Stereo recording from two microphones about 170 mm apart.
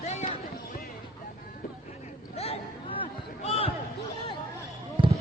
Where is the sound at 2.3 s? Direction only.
35° left (ahead or behind).